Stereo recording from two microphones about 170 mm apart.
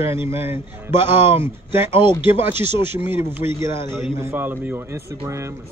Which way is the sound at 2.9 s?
15° right (ahead or behind).